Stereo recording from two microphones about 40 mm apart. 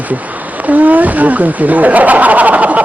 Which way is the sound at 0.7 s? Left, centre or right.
Right.